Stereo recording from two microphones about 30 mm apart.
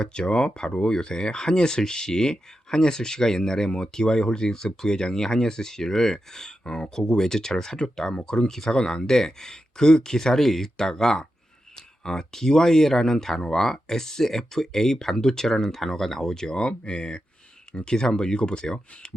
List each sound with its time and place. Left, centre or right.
0.0 s speech: left
16.6 s speech: left